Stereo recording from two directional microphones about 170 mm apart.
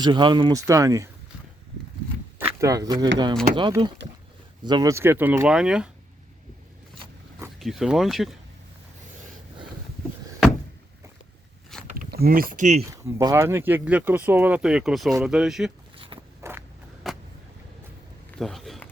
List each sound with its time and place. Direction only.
0.0 s speech: 25° right (ahead or behind)
2.6 s speech: 20° right (ahead or behind); by 5.9 s 5° right (ahead or behind)
7.6 s speech: centre (ahead or behind)
11.9 s speech: 60° right (ahead or behind); by 12.8 s 45° right (ahead or behind)
12.8 s speech: 20° right (ahead or behind); by 15.7 s 5° right (ahead or behind)
16.4 s biting: 15° right (ahead or behind)
17.0 s vehicle: centre (ahead or behind)
18.3 s a sound: 5° left (ahead or behind)